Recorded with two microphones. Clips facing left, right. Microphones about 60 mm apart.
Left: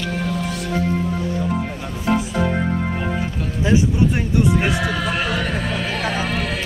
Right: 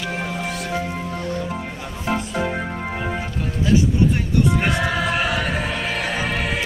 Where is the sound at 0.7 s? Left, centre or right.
Centre.